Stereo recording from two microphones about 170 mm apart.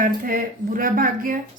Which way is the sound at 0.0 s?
55° right (ahead or behind).